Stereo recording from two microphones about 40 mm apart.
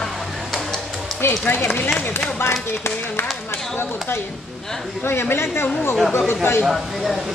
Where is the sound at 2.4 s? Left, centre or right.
Left.